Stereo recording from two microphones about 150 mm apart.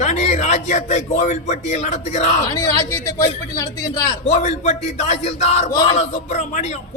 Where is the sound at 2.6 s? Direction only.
20° left (ahead or behind).